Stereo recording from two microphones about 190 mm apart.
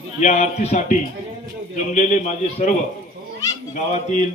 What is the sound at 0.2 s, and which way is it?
A man's voice, 40° left (ahead or behind).